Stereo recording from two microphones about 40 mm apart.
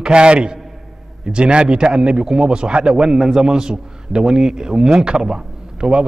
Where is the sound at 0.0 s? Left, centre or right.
Right.